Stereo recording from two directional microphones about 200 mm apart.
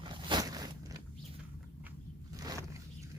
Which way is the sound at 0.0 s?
25° right (ahead or behind).